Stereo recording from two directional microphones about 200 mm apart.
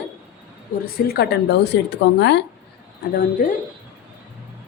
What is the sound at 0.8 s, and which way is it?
A woman's voice, 50° left (ahead or behind).